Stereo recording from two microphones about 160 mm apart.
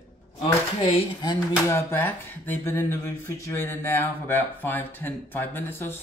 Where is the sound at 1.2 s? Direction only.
25° left (ahead or behind).